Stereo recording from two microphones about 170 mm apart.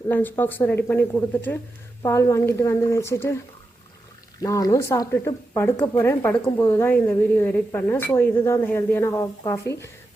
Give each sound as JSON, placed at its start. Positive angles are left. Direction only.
{"t": 0.1, "sound": "a woman's voice", "side_deg": 10}
{"t": 4.4, "sound": "a woman's voice", "side_deg": 20}